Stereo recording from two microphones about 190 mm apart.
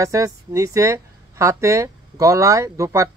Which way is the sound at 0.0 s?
15° right (ahead or behind).